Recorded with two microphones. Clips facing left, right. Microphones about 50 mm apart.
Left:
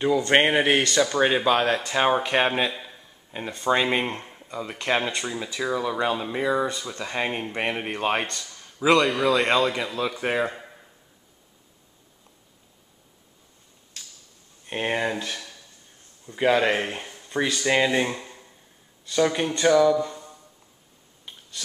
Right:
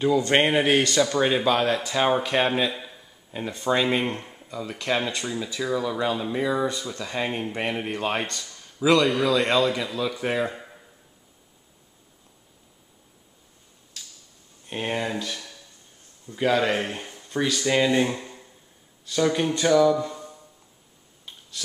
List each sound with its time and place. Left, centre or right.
0.3 s speech: centre
2.7 s a sound: centre
3.7 s speech: centre
6.2 s speech: centre
10.4 s speech: centre
14.7 s speech: centre
18.1 s a sound: centre
19.0 s speech: centre